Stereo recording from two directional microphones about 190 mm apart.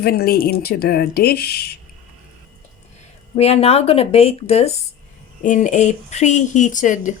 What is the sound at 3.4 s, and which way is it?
A woman's voice, 30° left (ahead or behind).